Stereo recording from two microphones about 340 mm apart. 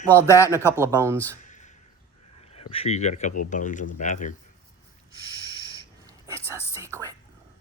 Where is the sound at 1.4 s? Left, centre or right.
Left.